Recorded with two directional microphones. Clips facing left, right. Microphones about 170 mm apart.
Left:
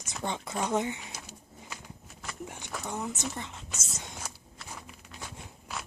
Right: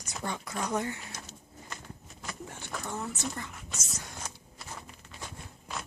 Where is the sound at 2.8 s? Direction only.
15° left (ahead or behind).